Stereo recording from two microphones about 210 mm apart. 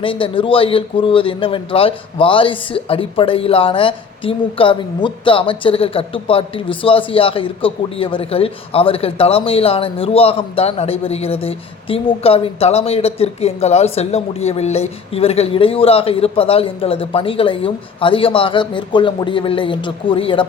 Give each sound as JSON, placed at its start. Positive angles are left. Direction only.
{"t": 0.0, "sound": "a man's voice", "side_deg": 25}